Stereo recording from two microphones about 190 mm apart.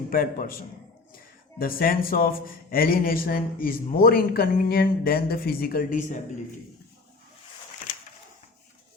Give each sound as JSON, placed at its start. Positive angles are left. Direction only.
{"t": 0.1, "sound": "a man's voice", "side_deg": 50}